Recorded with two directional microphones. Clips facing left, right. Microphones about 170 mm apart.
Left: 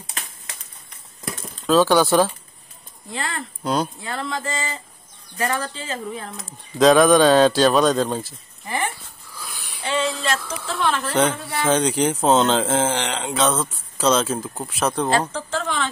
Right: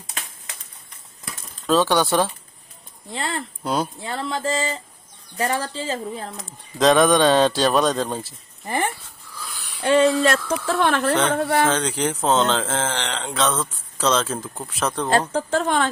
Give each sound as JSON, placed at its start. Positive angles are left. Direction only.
{"t": 1.7, "sound": "speech", "side_deg": 0}
{"t": 3.1, "sound": "a sound", "side_deg": -25}
{"t": 3.6, "sound": "speech", "side_deg": -5}
{"t": 4.0, "sound": "a sound", "side_deg": -30}
{"t": 5.5, "sound": "speech", "side_deg": -30}
{"t": 6.4, "sound": "speech", "side_deg": 0}
{"t": 9.8, "sound": "speech", "side_deg": -50}
{"t": 11.7, "sound": "speech", "side_deg": 15}
{"t": 15.0, "sound": "speech", "side_deg": -50}